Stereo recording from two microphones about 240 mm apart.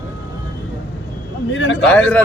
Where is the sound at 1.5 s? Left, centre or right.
Left.